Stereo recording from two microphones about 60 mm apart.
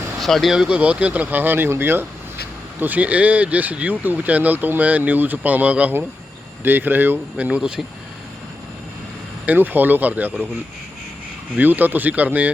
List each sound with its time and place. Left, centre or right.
0.2 s speech: centre
0.5 s speech: centre
0.8 s speech: right
2.8 s speech: right
7.3 s speech: right
9.5 s speech: right
11.5 s speech: right